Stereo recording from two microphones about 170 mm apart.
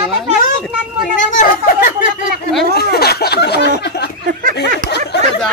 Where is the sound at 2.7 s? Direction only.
70° left (ahead or behind).